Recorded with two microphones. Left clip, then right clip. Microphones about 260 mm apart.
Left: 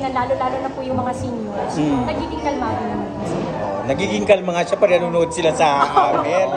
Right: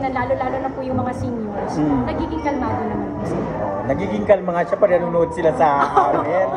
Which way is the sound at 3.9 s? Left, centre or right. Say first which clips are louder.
Left 1 dB; left.